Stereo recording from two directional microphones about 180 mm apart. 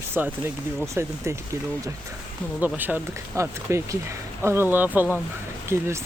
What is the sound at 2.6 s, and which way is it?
Speech, 10° right (ahead or behind).